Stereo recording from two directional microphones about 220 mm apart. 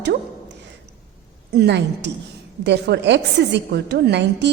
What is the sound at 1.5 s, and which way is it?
A woman's voice, 50° right (ahead or behind).